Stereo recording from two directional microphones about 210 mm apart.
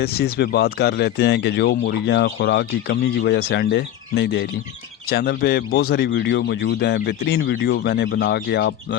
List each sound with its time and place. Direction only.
0.0 s speech: 50° left (ahead or behind)